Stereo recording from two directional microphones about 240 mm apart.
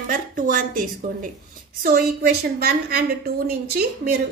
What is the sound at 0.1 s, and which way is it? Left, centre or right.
A woman's voice, right.